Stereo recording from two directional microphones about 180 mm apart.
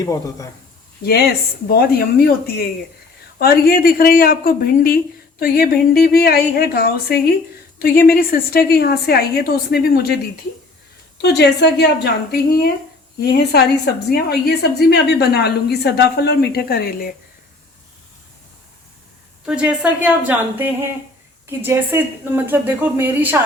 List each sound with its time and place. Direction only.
0.0 s speech: 20° left (ahead or behind)
1.0 s a woman's voice: 60° left (ahead or behind)
11.2 s a woman's voice: 65° left (ahead or behind)
19.5 s a woman's voice: 5° right (ahead or behind)